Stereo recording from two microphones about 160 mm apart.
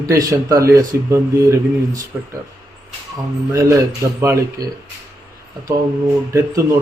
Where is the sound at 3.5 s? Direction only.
20° right (ahead or behind).